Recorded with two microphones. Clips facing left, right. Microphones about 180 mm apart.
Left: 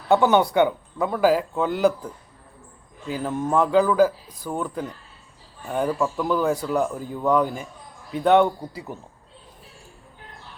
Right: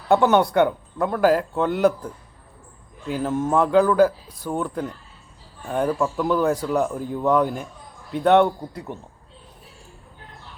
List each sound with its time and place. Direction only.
0.1 s speech: centre (ahead or behind)
3.1 s speech: centre (ahead or behind)